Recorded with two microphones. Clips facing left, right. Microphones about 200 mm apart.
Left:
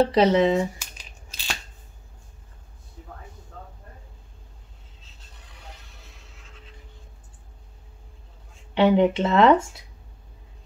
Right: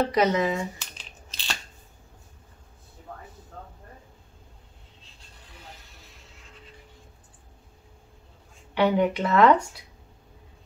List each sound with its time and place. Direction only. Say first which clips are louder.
0.0 s speech: left 5 dB; 30° left (ahead or behind)
0.7 s crushing: even; 10° left (ahead or behind)
8.7 s speech: left 4 dB; 25° left (ahead or behind)